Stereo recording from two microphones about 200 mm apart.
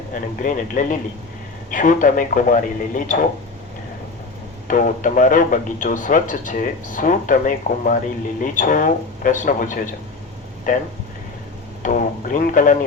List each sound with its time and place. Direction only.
0.1 s speech: 40° left (ahead or behind)
4.7 s speech: 40° left (ahead or behind)